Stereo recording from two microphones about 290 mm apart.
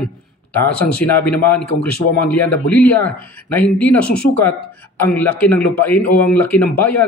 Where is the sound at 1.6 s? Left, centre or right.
Left.